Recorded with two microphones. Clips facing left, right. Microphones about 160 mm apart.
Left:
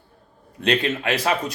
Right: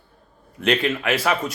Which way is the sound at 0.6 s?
25° left (ahead or behind).